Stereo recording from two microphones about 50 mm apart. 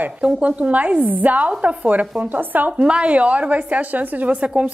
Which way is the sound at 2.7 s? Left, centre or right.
Right.